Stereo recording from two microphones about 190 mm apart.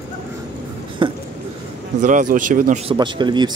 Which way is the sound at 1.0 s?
25° right (ahead or behind).